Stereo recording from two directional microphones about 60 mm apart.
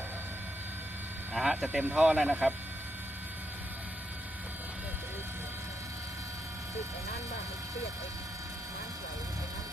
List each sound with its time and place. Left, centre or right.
1.3 s speech: centre